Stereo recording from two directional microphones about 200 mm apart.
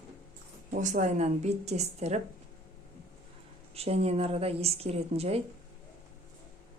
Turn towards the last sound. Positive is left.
turn(degrees=-30)  # may be behind; listen again after turning